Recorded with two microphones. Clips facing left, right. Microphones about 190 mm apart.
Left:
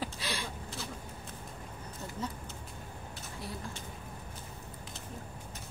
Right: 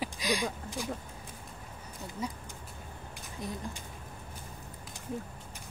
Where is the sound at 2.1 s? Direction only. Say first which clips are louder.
Right 2 dB; 10° right (ahead or behind).